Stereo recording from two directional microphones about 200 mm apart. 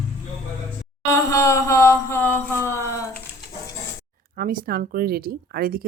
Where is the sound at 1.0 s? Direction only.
15° left (ahead or behind).